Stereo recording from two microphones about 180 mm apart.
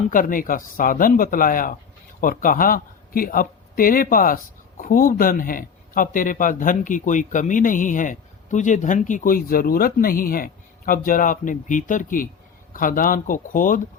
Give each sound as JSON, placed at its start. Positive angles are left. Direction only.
{"t": 0.1, "sound": "speech", "side_deg": 50}